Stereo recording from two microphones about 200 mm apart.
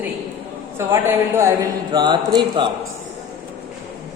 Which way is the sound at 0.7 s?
15° right (ahead or behind).